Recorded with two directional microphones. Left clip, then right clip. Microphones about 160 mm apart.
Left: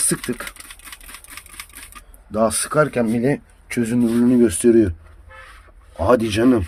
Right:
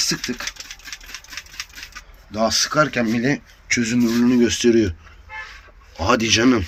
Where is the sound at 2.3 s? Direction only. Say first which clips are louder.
Even; 90° left; by 3.9 s 55° left (ahead or behind).